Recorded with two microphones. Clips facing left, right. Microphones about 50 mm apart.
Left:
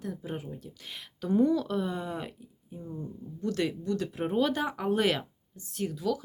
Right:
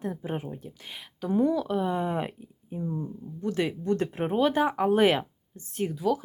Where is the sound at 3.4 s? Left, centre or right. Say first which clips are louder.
Right 2 dB; centre.